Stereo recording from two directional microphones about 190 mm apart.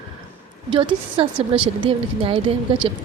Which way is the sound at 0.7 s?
30° right (ahead or behind).